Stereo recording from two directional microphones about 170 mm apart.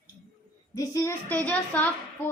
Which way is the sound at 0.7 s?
20° left (ahead or behind).